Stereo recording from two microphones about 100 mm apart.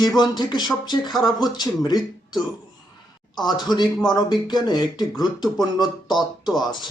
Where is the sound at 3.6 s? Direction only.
45° left (ahead or behind).